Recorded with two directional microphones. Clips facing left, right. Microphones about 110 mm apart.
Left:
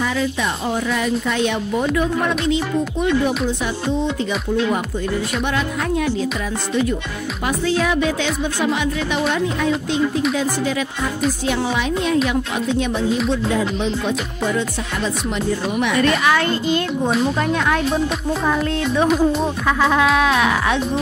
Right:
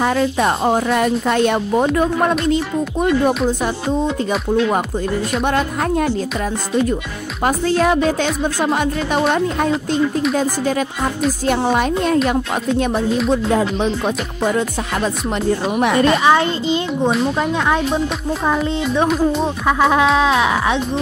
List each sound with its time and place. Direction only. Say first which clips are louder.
0.0 s a woman's voice: right 5 dB; 50° right (ahead or behind)
5.4 s a woman's voice: right 3 dB; 45° right (ahead or behind)
7.4 s a woman's voice: right 4 dB; 45° right (ahead or behind)
10.3 s a woman's voice: right 3 dB; 45° right (ahead or behind)
16.0 s a woman's voice: right 4 dB; 30° right (ahead or behind)
17.1 s speech: left 1 dB; centre (ahead or behind)
17.6 s speech: right 1 dB; 15° right (ahead or behind)
19.0 s speech: left 2 dB; centre (ahead or behind)
19.6 s speech: right 3 dB; 15° right (ahead or behind)